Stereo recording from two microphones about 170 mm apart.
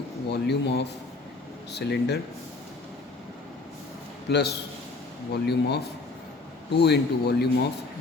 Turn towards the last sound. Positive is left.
turn(degrees=75)  # may be behind; listen again after turning